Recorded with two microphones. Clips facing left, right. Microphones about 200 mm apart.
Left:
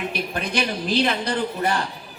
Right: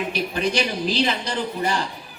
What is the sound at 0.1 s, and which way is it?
A man's voice, 55° left (ahead or behind).